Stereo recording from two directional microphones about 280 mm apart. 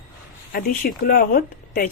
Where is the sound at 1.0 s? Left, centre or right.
Left.